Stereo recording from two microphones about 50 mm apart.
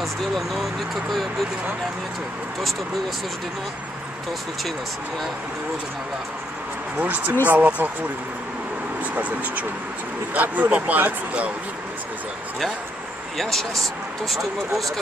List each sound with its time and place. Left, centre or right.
0.0 s speech: centre
7.0 s speech: right
9.0 s speech: right
13.4 s speech: centre